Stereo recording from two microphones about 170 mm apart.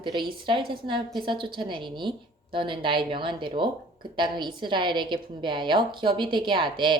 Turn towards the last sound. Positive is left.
turn(degrees=-25)  # may be behind; listen again after turning